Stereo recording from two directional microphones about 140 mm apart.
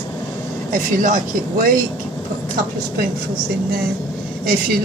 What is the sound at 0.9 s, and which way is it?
Speech, 70° right (ahead or behind).